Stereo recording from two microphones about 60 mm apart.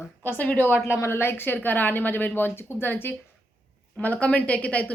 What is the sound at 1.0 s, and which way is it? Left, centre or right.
A woman's voice, left.